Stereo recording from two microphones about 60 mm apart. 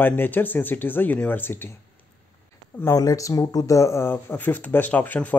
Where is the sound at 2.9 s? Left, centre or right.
Left.